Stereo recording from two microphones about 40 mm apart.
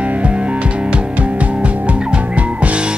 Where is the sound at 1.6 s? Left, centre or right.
Right.